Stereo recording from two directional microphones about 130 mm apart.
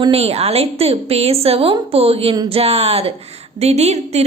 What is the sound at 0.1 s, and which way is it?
A woman's voice, 50° right (ahead or behind).